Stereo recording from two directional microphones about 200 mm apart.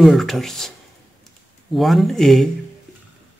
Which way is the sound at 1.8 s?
Centre (ahead or behind).